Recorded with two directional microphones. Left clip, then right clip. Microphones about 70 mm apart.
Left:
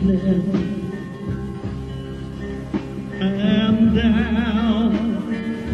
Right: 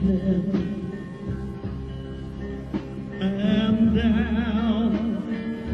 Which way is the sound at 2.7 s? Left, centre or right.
Left.